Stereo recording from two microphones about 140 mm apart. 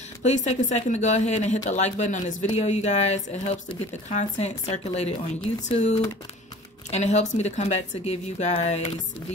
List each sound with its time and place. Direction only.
0.2 s a woman's voice: 55° left (ahead or behind)